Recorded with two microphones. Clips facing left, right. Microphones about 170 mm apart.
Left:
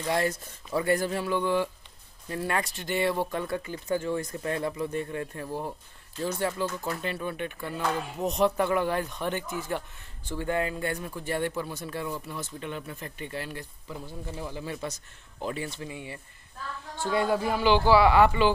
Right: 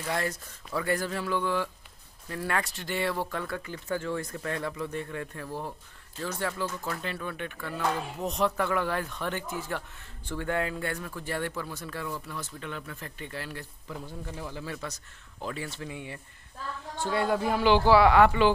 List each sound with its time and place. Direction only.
0.0 s speech: 25° left (ahead or behind)
15.9 s speech: 5° left (ahead or behind)